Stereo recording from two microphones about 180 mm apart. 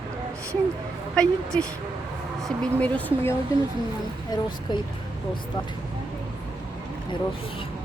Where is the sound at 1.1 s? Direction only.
5° left (ahead or behind).